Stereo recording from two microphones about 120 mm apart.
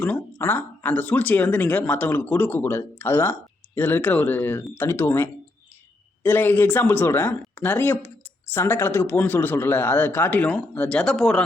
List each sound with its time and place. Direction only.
0.0 s speech: 15° left (ahead or behind)